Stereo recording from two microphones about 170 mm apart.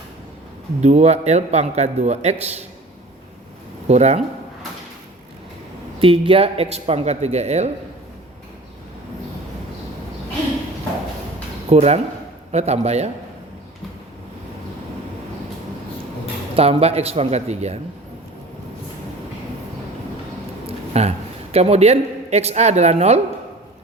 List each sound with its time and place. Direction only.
0.8 s speech: 40° right (ahead or behind)
3.8 s speech: 40° right (ahead or behind)
6.0 s speech: 35° right (ahead or behind)
11.7 s speech: 40° right (ahead or behind)
16.6 s speech: 35° right (ahead or behind)
20.7 s a man's voice: 40° right (ahead or behind)